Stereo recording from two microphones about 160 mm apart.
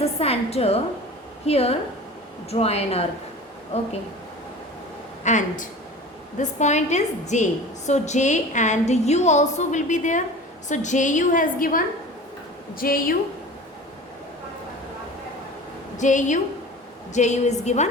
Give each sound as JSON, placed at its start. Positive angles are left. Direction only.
{"t": 0.0, "sound": "a sound", "side_deg": 40}
{"t": 1.5, "sound": "speech", "side_deg": 40}
{"t": 5.2, "sound": "a woman's voice", "side_deg": 50}
{"t": 16.0, "sound": "speech", "side_deg": 50}